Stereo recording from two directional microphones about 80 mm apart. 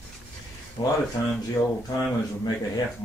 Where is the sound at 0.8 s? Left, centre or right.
Left.